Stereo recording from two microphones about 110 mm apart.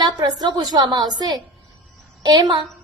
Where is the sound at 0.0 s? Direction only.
40° right (ahead or behind).